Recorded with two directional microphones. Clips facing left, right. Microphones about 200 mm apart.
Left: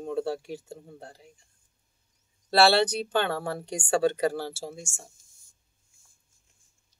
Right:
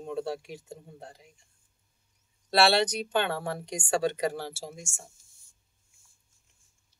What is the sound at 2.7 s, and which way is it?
Speech, 30° left (ahead or behind).